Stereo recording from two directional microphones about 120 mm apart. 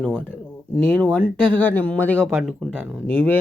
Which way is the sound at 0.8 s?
15° left (ahead or behind).